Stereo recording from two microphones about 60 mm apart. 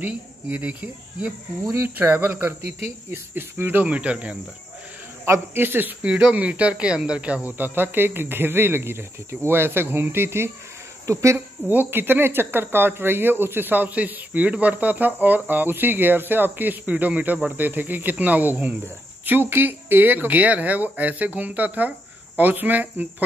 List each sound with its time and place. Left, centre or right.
0.0 s speech: right
1.7 s speech: right
2.8 s speech: right
3.8 s speech: right
5.5 s speech: right
6.0 s speech: right
7.4 s speech: right
11.1 s speech: right
11.3 s speech: right